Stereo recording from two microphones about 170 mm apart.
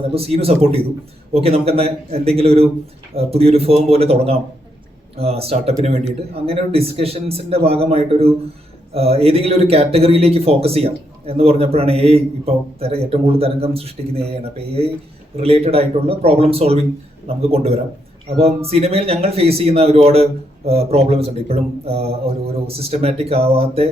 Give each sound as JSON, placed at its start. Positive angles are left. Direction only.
{"t": 0.1, "sound": "speech", "side_deg": -35}